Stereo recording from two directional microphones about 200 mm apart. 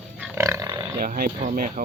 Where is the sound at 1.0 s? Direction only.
45° right (ahead or behind).